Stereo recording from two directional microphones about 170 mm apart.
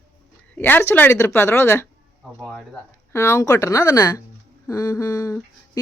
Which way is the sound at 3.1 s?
15° left (ahead or behind).